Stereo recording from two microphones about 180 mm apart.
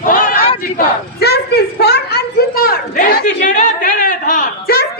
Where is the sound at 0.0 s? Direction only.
50° left (ahead or behind).